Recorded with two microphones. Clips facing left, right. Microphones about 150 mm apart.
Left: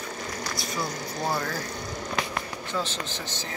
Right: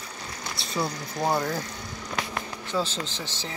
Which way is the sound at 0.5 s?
25° right (ahead or behind).